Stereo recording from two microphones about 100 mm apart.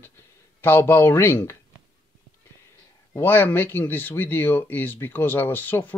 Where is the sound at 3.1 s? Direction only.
20° left (ahead or behind).